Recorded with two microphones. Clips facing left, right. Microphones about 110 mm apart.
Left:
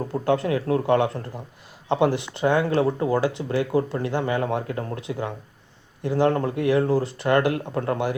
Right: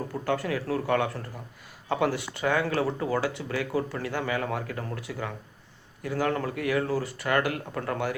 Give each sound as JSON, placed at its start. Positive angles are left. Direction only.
{"t": 0.0, "sound": "speech", "side_deg": 20}